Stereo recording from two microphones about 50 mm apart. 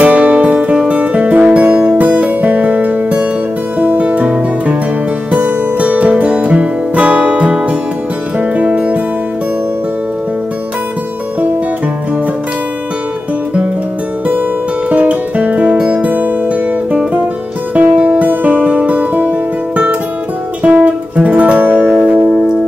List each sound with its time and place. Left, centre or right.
0.0 s music: right
14.9 s music: right
20.6 s music: right